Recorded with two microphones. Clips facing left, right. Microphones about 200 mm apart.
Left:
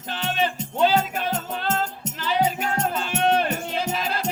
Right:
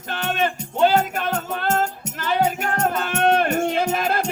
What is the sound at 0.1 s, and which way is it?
Music, 50° right (ahead or behind).